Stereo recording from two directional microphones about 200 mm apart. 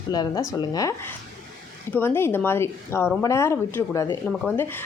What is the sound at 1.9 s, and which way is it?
Speech, 10° left (ahead or behind).